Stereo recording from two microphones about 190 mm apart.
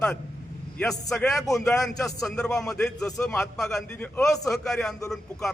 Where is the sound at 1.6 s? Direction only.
15° left (ahead or behind).